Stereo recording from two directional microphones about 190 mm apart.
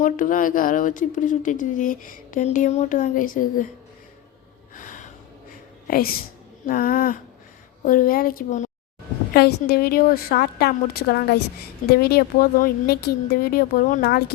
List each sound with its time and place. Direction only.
0.0 s speech: 45° left (ahead or behind)
4.7 s gasp: 45° left (ahead or behind)
6.7 s speech: 50° left (ahead or behind)
9.3 s speech: 55° left (ahead or behind)